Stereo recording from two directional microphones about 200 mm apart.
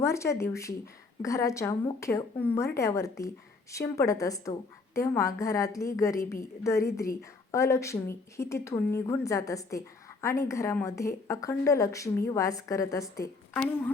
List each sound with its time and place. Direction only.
0.0 s a woman's voice: 15° left (ahead or behind)